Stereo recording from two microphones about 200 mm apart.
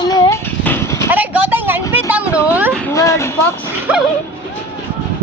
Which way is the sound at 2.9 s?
15° left (ahead or behind).